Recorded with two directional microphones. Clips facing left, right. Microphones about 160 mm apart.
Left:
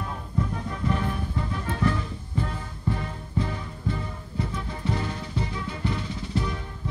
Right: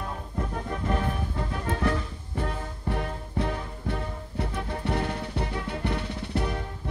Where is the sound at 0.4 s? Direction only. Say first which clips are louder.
Left 2 dB; 50° right (ahead or behind).